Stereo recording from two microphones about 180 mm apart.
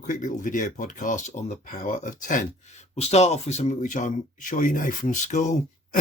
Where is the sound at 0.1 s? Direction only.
45° left (ahead or behind).